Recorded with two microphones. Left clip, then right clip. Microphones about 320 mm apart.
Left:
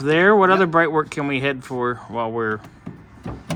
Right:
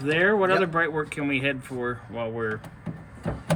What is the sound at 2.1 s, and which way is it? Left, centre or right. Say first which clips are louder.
Speech: left 7 dB; left.